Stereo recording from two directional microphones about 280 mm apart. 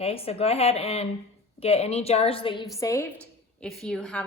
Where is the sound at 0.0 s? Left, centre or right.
Left.